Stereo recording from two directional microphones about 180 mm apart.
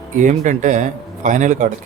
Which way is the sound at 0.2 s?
45° right (ahead or behind).